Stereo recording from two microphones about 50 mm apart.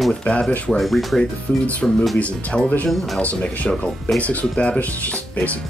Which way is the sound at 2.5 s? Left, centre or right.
Left.